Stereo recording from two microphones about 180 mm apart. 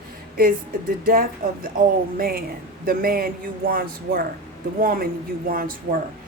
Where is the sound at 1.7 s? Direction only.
50° right (ahead or behind).